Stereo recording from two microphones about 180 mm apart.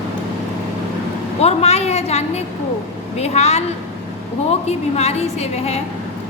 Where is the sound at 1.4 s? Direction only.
35° left (ahead or behind).